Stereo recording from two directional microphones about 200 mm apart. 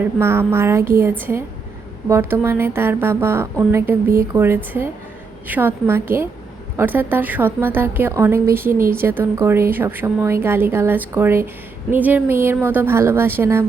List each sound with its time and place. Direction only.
0.0 s a woman's voice: 10° right (ahead or behind)